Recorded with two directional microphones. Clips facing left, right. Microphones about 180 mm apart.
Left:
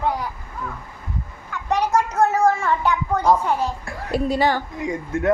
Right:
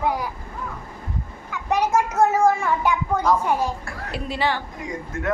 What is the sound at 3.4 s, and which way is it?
Speech, 10° right (ahead or behind).